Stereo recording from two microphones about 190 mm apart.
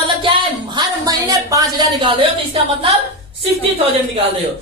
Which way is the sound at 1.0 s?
20° right (ahead or behind).